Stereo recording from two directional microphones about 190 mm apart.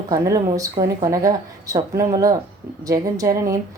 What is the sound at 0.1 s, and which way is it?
A woman's voice, 20° right (ahead or behind).